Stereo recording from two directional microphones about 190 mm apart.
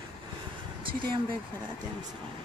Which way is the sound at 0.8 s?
25° right (ahead or behind).